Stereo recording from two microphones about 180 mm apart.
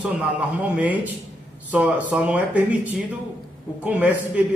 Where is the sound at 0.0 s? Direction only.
10° right (ahead or behind).